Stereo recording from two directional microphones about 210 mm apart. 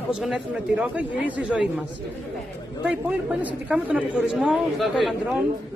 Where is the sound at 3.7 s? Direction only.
5° right (ahead or behind).